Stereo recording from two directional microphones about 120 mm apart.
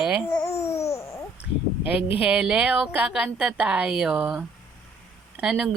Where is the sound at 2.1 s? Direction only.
10° right (ahead or behind).